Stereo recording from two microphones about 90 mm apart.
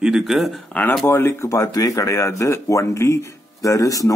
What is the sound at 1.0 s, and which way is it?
A man's voice, 30° left (ahead or behind).